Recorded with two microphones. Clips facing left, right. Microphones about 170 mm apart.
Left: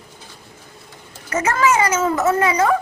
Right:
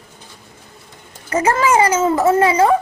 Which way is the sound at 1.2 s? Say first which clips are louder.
Right 2 dB; 30° right (ahead or behind).